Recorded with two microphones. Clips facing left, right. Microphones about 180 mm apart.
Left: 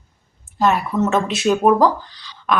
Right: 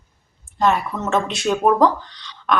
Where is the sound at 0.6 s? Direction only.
Centre (ahead or behind).